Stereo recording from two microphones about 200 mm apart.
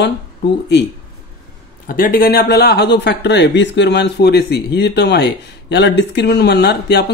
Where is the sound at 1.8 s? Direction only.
45° left (ahead or behind).